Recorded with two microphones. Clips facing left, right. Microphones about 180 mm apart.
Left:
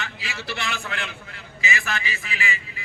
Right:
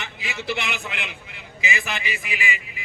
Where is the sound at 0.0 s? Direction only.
20° right (ahead or behind).